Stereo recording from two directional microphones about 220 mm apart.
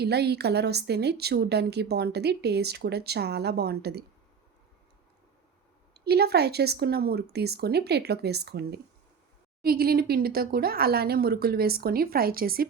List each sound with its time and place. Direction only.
0.0 s a woman's voice: 50° right (ahead or behind)
5.9 s a woman's voice: 45° right (ahead or behind)